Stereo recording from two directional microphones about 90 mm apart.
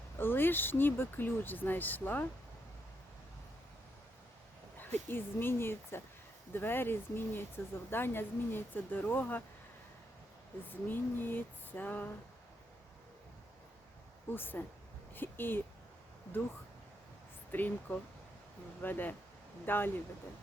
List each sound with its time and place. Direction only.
0.2 s speech: 25° left (ahead or behind)
4.8 s speech: 25° left (ahead or behind)
10.7 s speech: 20° left (ahead or behind)
14.3 s speech: 25° left (ahead or behind)
17.5 s speech: 20° left (ahead or behind)